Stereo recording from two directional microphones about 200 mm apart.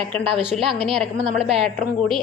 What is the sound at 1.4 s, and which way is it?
Speech, centre (ahead or behind).